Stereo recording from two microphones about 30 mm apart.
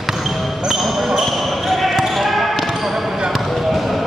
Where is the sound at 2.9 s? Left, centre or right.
Right.